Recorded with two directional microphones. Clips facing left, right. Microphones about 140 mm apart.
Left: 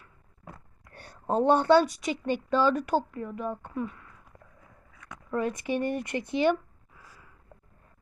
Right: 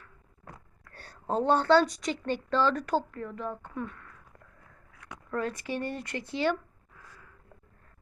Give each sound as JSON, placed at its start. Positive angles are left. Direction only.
{"t": 0.9, "sound": "a woman's voice", "side_deg": 15}